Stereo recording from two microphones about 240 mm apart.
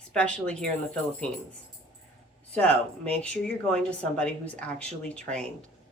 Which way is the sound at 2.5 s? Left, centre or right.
Centre.